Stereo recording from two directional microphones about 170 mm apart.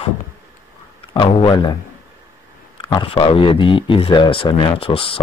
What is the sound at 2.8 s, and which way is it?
Speech, 30° left (ahead or behind).